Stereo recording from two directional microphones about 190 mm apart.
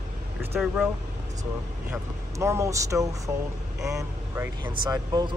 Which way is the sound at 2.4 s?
15° right (ahead or behind).